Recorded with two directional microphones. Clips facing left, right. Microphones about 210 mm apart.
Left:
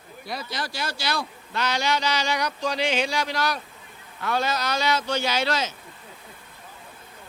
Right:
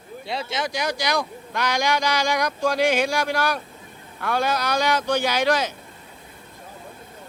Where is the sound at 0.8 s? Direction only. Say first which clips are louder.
Right 4 dB; 15° right (ahead or behind).